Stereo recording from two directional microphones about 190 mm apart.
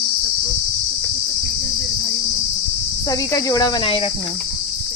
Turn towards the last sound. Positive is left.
turn(degrees=30)  # may be behind; listen again after turning